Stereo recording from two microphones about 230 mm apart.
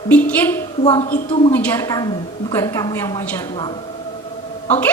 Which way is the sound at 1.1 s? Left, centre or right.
Left.